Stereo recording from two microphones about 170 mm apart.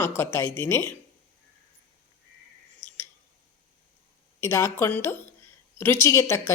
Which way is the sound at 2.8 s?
10° left (ahead or behind).